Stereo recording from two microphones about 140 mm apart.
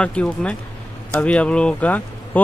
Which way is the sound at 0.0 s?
5° left (ahead or behind).